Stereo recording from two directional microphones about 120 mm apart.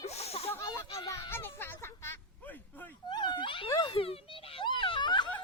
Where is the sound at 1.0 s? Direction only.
20° left (ahead or behind).